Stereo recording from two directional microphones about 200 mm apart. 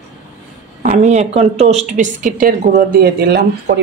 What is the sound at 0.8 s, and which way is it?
A woman's voice, 35° right (ahead or behind).